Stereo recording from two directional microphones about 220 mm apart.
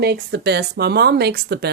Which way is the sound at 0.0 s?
45° right (ahead or behind).